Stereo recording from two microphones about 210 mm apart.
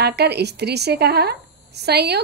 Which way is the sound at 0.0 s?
50° right (ahead or behind).